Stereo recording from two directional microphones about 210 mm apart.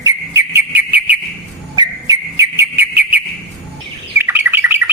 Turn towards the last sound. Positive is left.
turn(degrees=-10)  # may be behind; listen again after turning